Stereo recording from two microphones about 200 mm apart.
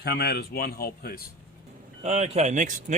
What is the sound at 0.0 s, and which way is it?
Speech, 55° left (ahead or behind).